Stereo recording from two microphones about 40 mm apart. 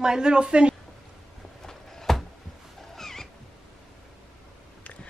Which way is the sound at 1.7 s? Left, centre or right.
Centre.